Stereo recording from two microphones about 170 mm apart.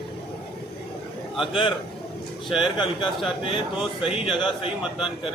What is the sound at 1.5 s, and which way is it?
A man's voice, 30° left (ahead or behind).